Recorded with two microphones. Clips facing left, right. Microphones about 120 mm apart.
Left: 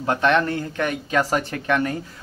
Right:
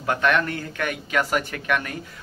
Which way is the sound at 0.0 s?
25° left (ahead or behind).